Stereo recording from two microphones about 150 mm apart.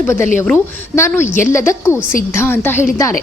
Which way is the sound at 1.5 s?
20° left (ahead or behind).